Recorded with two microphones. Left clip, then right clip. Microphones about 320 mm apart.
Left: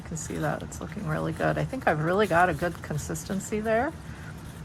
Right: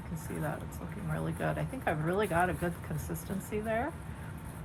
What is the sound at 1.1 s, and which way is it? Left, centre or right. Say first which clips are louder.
Speech: left 8 dB; left.